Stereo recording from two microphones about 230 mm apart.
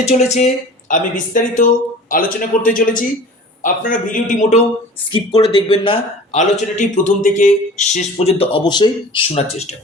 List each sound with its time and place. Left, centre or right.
0.0 s speech: left
5.0 s a man's voice: left